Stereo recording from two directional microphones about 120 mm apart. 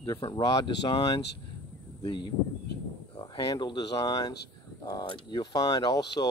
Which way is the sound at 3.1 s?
45° left (ahead or behind).